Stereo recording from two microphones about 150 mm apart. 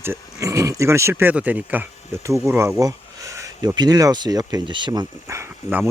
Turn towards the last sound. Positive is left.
turn(degrees=-15)  # may be behind; listen again after turning